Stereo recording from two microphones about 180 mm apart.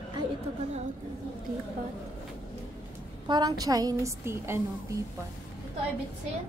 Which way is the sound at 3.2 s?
25° right (ahead or behind).